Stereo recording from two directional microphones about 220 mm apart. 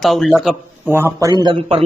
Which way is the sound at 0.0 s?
Centre (ahead or behind).